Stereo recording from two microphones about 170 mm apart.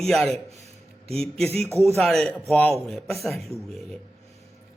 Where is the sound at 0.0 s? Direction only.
5° left (ahead or behind).